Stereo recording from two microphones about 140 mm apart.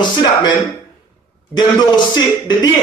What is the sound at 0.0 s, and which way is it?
A man's voice, 30° left (ahead or behind).